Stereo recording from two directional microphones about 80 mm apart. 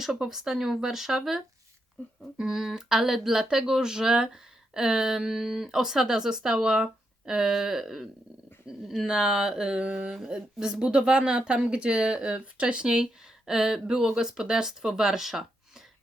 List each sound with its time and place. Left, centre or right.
0.0 s speech: centre
2.0 s speech: centre
2.4 s speech: centre